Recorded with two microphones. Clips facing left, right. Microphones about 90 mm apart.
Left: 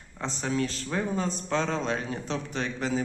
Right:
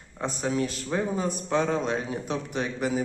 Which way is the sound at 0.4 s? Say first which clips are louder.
Right 1 dB; 15° right (ahead or behind).